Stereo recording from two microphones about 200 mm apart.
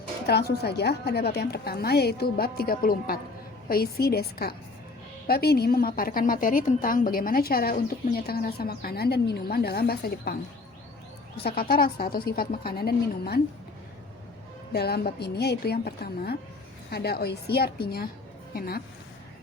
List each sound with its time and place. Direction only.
0.3 s a woman's voice: 55° left (ahead or behind)
11.4 s a woman's voice: 50° left (ahead or behind)
14.7 s a woman's voice: 50° left (ahead or behind)